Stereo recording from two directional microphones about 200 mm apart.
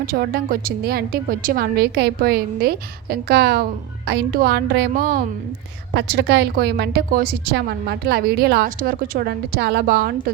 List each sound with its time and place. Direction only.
0.0 s a woman's voice: 50° right (ahead or behind)